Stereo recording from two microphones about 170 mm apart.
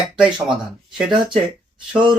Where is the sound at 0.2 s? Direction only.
5° right (ahead or behind).